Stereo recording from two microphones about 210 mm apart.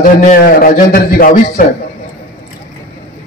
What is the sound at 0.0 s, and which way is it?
A man's voice, 40° left (ahead or behind).